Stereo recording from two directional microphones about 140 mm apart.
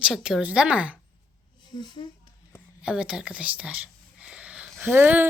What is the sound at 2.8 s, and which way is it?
Speech, 5° right (ahead or behind).